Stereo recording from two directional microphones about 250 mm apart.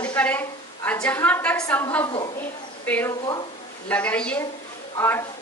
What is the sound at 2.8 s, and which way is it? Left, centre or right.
A woman's voice, centre.